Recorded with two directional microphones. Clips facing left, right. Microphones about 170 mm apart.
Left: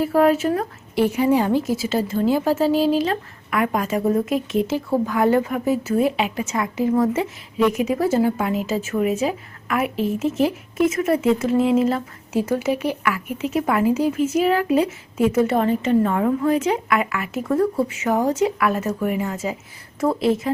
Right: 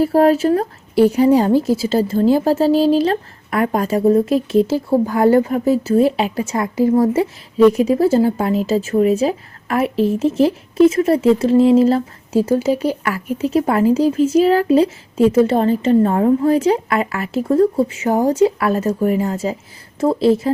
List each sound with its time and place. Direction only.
0.0 s speech: 35° right (ahead or behind)